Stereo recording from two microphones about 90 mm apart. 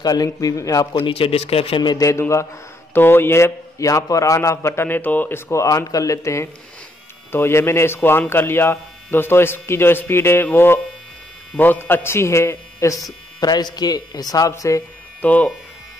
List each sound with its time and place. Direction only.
0.0 s a man's voice: 45° left (ahead or behind)
0.9 s speech: 85° left
1.8 s a man's voice: 50° left (ahead or behind)
2.0 s speech: 35° left (ahead or behind)
5.5 s speech: 35° left (ahead or behind)
15.2 s speech: 15° left (ahead or behind)